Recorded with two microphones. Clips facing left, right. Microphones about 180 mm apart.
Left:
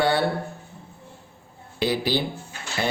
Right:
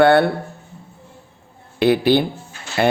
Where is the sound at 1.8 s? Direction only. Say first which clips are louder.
Right 9 dB; 60° right (ahead or behind).